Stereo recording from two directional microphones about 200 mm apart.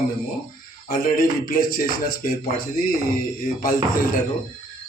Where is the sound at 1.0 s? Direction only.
45° left (ahead or behind).